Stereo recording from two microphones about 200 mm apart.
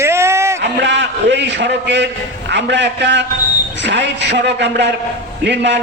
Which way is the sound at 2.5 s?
60° right (ahead or behind).